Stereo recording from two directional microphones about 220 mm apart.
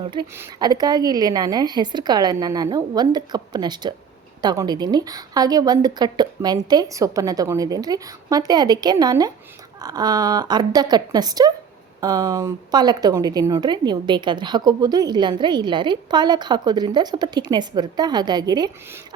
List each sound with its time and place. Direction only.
0.0 s a woman's voice: 20° right (ahead or behind)